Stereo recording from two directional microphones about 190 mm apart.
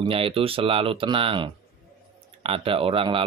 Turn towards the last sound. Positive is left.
turn(degrees=-30)  # may be behind; listen again after turning